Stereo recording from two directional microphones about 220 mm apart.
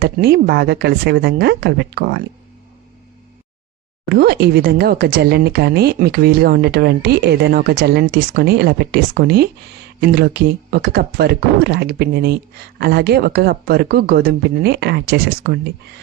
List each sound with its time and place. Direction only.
0.0 s speech: 45° right (ahead or behind)
4.1 s speech: 45° right (ahead or behind)